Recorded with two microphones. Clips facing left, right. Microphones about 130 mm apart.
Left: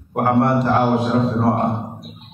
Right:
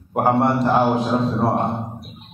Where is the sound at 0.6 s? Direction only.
15° right (ahead or behind).